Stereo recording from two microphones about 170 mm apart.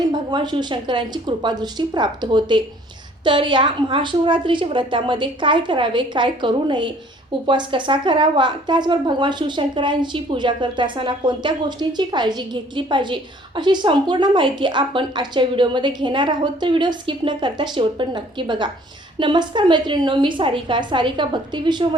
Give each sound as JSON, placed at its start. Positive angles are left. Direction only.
{"t": 0.1, "sound": "a woman's voice", "side_deg": -25}